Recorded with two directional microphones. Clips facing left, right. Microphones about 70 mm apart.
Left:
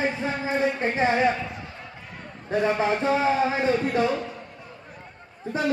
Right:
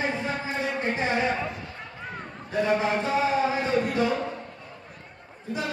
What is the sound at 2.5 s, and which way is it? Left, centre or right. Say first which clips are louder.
Speech: left 3 dB; left.